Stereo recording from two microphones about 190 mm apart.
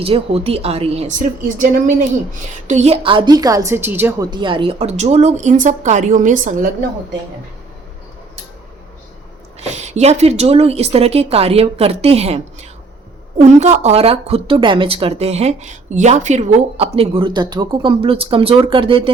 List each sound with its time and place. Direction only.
0.0 s a woman's voice: 30° right (ahead or behind); by 4.3 s 10° right (ahead or behind)
4.3 s a woman's voice: 25° right (ahead or behind); by 6.7 s 45° right (ahead or behind)
9.6 s a woman's voice: 35° right (ahead or behind)
13.6 s speech: 35° right (ahead or behind)